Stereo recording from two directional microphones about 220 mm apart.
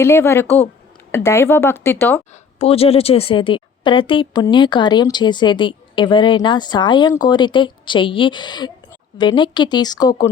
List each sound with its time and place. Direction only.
0.0 s speech: 10° left (ahead or behind)
2.3 s a woman's voice: 25° left (ahead or behind)